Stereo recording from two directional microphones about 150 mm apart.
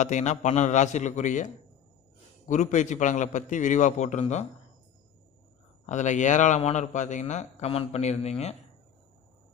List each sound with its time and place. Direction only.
0.0 s a man's voice: 55° left (ahead or behind)
2.5 s a man's voice: 55° left (ahead or behind)
5.8 s a man's voice: 55° left (ahead or behind)